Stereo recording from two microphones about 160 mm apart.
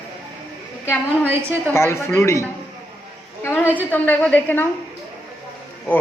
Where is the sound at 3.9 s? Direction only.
10° left (ahead or behind).